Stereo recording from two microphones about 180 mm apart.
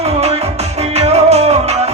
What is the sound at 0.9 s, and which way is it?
Music, 35° right (ahead or behind).